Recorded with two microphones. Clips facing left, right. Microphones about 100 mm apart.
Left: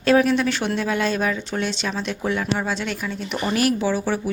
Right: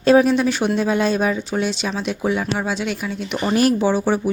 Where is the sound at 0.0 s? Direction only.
20° right (ahead or behind).